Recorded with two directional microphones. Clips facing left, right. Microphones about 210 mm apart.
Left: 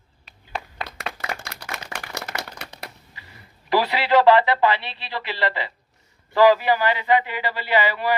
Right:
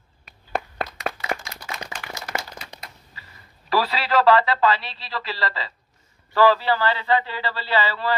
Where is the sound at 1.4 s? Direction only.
65° left (ahead or behind).